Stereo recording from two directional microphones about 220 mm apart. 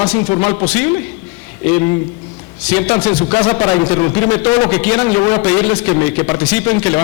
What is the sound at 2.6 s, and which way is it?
Speech, 10° left (ahead or behind).